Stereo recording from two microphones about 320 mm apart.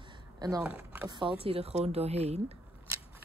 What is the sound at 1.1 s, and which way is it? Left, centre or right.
A woman's voice, centre.